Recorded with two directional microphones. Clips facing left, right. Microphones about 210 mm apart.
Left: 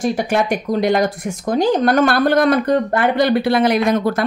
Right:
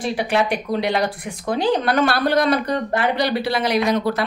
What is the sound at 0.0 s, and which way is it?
Speech, 45° left (ahead or behind).